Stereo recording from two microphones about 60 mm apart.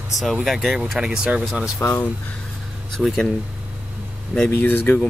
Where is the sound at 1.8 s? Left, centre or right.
Left.